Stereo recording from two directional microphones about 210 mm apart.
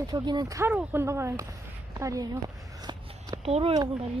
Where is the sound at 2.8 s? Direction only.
20° right (ahead or behind).